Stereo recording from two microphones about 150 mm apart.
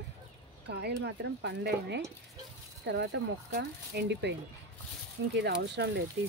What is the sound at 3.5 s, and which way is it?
Speech, 90° right.